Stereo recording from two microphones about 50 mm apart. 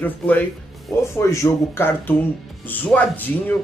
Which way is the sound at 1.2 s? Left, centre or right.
Left.